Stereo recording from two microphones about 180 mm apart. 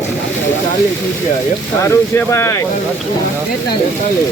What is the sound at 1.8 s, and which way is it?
Speech, 15° left (ahead or behind).